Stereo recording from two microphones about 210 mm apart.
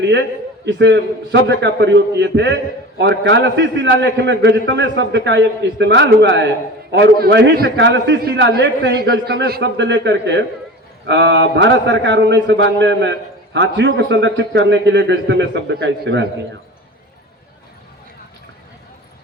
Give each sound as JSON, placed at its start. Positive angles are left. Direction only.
{"t": 0.0, "sound": "a man's voice", "side_deg": -55}